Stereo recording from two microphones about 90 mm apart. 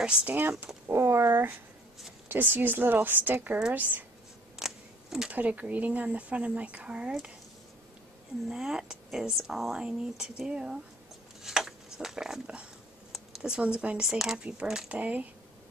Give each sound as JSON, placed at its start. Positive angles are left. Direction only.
{"t": 0.0, "sound": "a woman's voice", "side_deg": -10}
{"t": 4.6, "sound": "a sound", "side_deg": -5}
{"t": 5.3, "sound": "a woman's voice", "side_deg": -15}
{"t": 8.5, "sound": "a woman's voice", "side_deg": -5}